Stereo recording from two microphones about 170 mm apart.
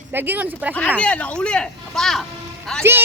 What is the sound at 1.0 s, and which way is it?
Speech, 5° left (ahead or behind).